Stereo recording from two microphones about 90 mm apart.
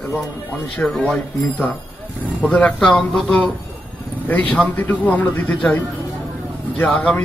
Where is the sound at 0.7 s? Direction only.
10° left (ahead or behind).